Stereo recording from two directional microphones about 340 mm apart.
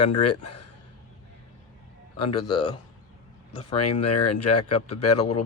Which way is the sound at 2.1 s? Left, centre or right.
Left.